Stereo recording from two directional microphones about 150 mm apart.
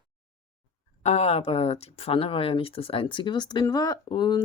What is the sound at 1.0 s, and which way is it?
Speech, 45° left (ahead or behind).